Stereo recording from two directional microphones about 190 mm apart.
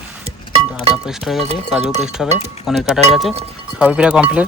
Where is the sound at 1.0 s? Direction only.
5° right (ahead or behind).